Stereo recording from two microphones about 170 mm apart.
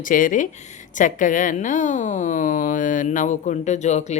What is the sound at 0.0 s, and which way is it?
Speech, 50° left (ahead or behind).